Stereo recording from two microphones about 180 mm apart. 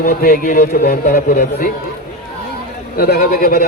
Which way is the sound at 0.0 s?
55° left (ahead or behind).